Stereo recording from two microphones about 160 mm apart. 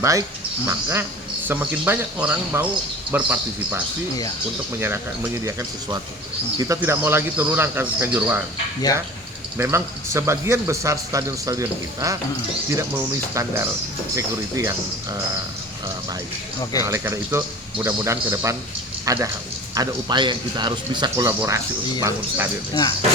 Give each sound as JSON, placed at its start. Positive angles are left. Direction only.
{"t": 0.0, "sound": "speech", "side_deg": -20}
{"t": 9.6, "sound": "speech", "side_deg": -15}
{"t": 16.8, "sound": "speech", "side_deg": -15}
{"t": 22.7, "sound": "speech", "side_deg": 25}